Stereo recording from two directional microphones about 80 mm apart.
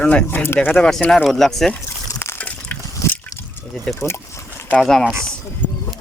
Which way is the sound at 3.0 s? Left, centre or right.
Left.